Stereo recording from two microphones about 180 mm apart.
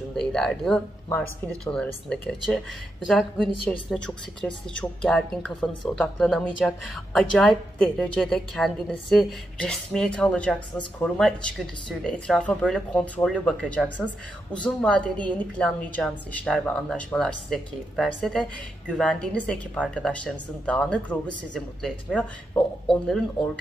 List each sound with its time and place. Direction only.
0.1 s a woman's voice: 5° left (ahead or behind)